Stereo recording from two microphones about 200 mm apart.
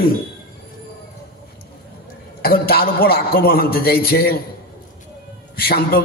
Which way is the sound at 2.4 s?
50° left (ahead or behind).